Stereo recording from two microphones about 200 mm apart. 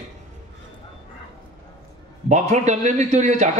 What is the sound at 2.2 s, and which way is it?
A man's voice, 35° right (ahead or behind).